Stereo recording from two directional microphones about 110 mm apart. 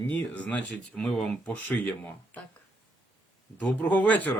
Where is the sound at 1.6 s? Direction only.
15° left (ahead or behind).